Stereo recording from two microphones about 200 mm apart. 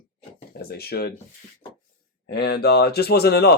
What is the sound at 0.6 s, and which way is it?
Speech, 50° left (ahead or behind).